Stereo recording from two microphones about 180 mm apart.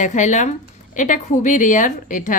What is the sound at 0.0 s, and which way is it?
A woman's voice, 40° left (ahead or behind).